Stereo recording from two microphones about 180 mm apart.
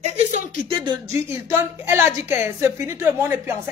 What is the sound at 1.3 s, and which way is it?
A woman's voice, 15° right (ahead or behind).